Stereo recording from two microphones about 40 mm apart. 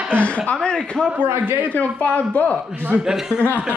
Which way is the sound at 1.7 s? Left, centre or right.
Left.